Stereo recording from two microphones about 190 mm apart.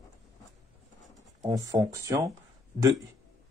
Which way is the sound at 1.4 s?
20° right (ahead or behind).